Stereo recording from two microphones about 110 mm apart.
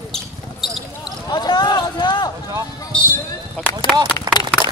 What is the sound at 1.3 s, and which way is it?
Run, 40° left (ahead or behind).